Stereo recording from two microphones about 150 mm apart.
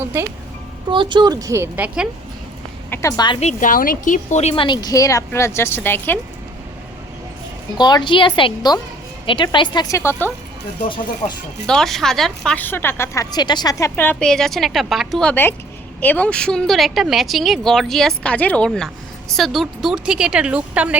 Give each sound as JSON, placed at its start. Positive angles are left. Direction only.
{"t": 0.0, "sound": "speech", "side_deg": -15}
{"t": 0.9, "sound": "a woman's voice", "side_deg": -30}
{"t": 2.9, "sound": "speech", "side_deg": 20}
{"t": 3.4, "sound": "speech", "side_deg": 65}
{"t": 7.8, "sound": "a woman's voice", "side_deg": 30}
{"t": 11.6, "sound": "a woman's voice", "side_deg": 5}
{"t": 13.3, "sound": "a woman's voice", "side_deg": 30}